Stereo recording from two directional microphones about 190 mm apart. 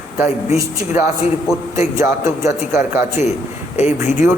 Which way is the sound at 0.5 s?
15° right (ahead or behind).